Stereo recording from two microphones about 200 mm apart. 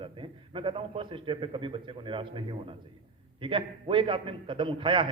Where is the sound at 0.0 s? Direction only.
25° right (ahead or behind).